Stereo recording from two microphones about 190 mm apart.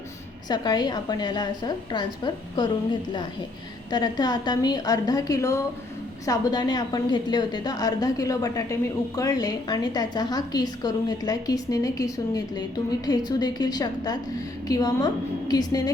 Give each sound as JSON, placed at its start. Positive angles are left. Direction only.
{"t": 0.4, "sound": "a woman's voice", "side_deg": 20}
{"t": 3.9, "sound": "a woman's voice", "side_deg": 20}